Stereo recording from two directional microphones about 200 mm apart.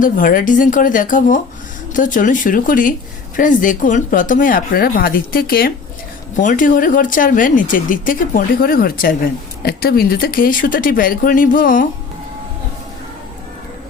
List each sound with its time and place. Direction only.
0.0 s speech: 45° left (ahead or behind)